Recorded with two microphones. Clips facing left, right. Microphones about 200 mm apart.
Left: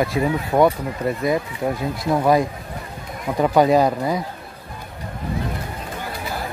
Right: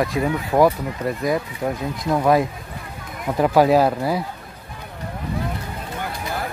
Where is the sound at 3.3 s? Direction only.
5° right (ahead or behind).